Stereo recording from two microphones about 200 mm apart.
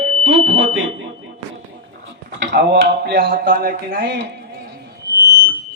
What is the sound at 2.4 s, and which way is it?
Speech, 60° right (ahead or behind).